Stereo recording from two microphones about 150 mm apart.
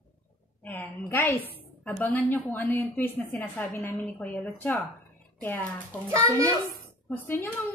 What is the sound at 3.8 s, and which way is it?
A woman's voice, 10° left (ahead or behind).